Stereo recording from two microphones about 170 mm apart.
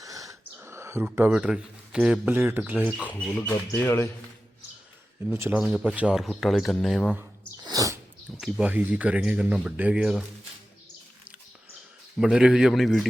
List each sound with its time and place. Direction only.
0.0 s speech: 20° right (ahead or behind)
3.0 s speech: 10° left (ahead or behind)
5.2 s speech: 10° right (ahead or behind)
7.6 s sneeze: 20° right (ahead or behind)
8.4 s speech: 5° right (ahead or behind)
12.1 s speech: 5° right (ahead or behind)